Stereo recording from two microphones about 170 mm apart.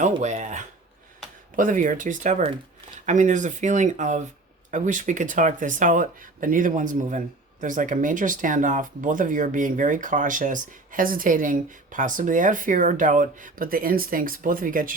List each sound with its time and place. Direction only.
0.0 s speech: 45° right (ahead or behind)